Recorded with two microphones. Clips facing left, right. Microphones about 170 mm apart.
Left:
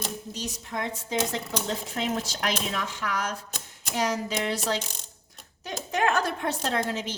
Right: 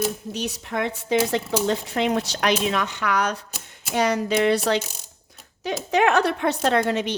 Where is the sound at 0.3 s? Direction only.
65° right (ahead or behind).